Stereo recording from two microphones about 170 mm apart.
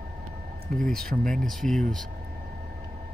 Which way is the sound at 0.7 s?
5° left (ahead or behind).